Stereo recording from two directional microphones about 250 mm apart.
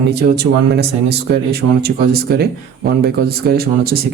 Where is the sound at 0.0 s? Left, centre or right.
Right.